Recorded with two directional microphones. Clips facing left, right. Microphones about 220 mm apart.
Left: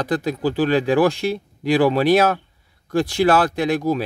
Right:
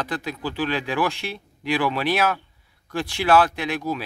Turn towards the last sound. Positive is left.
turn(degrees=40)  # may be behind; listen again after turning